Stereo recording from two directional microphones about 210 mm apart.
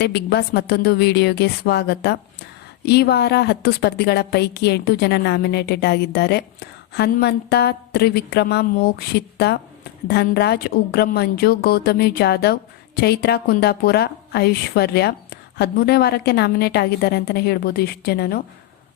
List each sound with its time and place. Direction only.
0.0 s a woman's voice: 50° left (ahead or behind)